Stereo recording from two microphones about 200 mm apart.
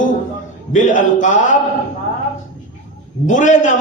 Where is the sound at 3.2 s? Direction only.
40° left (ahead or behind).